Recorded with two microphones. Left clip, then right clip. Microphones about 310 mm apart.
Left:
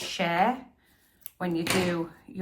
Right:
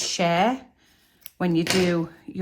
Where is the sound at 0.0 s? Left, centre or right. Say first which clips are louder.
Right 6 dB; centre.